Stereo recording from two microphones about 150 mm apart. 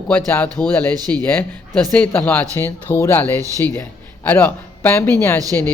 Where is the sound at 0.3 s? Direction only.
10° left (ahead or behind).